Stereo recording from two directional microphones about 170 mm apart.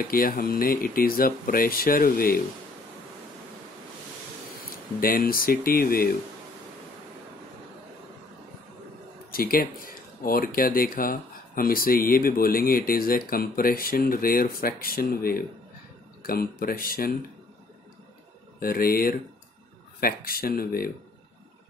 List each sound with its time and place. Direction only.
0.0 s speech: 60° left (ahead or behind)
5.0 s speech: 55° left (ahead or behind)
9.3 s speech: 60° left (ahead or behind)
18.6 s speech: 60° left (ahead or behind)